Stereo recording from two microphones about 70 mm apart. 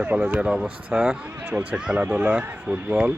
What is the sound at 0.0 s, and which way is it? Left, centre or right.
Speech, right.